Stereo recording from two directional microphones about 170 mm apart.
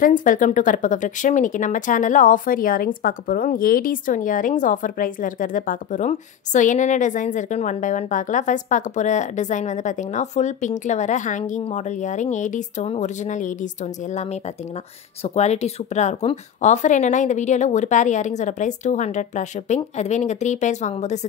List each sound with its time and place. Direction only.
0.0 s speech: 50° left (ahead or behind)
15.2 s speech: 40° left (ahead or behind)